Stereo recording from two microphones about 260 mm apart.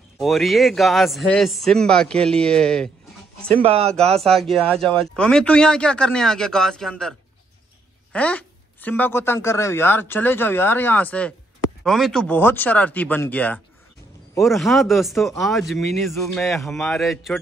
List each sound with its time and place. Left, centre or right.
0.2 s speech: centre
3.5 s speech: right
4.2 s a woman's voice: centre